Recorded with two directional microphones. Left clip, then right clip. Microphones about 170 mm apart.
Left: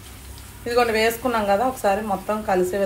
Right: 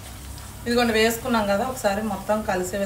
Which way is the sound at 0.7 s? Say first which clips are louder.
Left 1 dB; 35° left (ahead or behind).